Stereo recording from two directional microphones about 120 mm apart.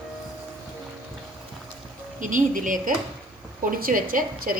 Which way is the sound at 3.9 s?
90° right.